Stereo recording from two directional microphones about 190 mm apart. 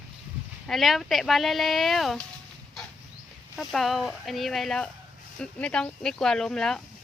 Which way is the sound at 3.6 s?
Centre (ahead or behind).